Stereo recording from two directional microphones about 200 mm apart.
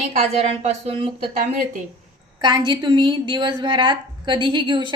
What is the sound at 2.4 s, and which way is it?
A woman's voice, 20° right (ahead or behind).